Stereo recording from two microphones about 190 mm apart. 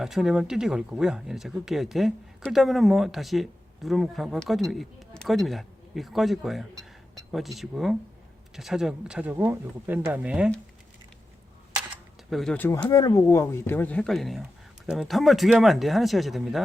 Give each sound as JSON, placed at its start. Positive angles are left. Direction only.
{"t": 0.0, "sound": "speech", "side_deg": 0}
{"t": 11.9, "sound": "speech", "side_deg": 0}